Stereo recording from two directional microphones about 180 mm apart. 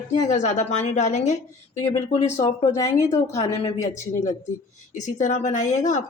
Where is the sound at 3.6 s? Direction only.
40° left (ahead or behind).